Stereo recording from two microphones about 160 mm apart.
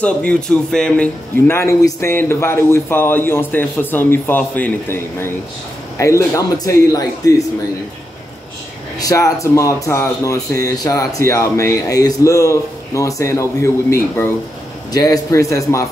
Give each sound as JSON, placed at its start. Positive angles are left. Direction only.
{"t": 0.0, "sound": "a man's voice", "side_deg": 5}
{"t": 9.0, "sound": "speech", "side_deg": 20}